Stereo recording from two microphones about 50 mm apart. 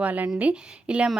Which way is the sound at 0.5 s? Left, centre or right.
Centre.